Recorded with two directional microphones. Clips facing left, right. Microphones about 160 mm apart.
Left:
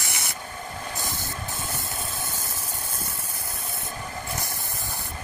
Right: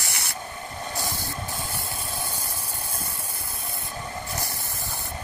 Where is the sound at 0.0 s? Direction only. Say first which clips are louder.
Left 1 dB; 20° left (ahead or behind).